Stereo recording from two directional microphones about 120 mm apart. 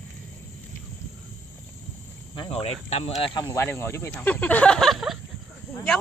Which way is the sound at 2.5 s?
55° left (ahead or behind).